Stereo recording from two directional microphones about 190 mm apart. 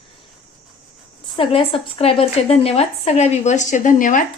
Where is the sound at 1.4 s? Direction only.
30° left (ahead or behind).